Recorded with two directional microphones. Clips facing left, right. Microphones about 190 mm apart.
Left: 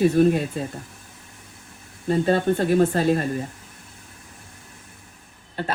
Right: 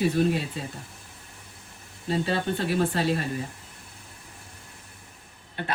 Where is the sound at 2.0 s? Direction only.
50° left (ahead or behind).